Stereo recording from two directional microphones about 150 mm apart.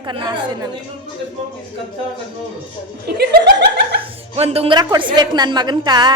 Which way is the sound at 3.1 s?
90° right.